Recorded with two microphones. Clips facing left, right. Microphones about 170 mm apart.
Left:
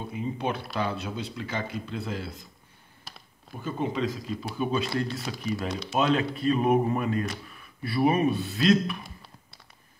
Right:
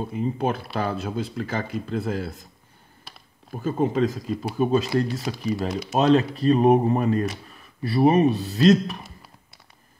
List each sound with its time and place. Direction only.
0.2 s speech: 45° right (ahead or behind)
3.5 s speech: 45° right (ahead or behind)